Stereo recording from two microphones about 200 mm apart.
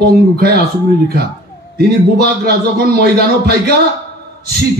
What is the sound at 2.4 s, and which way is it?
Speech, 50° right (ahead or behind).